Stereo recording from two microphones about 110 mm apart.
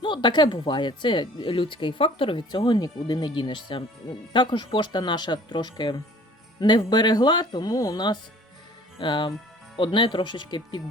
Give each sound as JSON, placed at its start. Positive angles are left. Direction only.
{"t": 0.0, "sound": "speech", "side_deg": 45}